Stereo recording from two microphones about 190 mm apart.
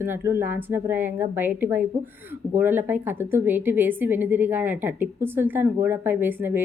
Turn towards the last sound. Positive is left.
turn(degrees=-10)  # may be behind; listen again after turning